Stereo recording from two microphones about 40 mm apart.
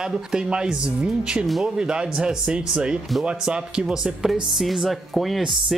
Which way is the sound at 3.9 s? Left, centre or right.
Centre.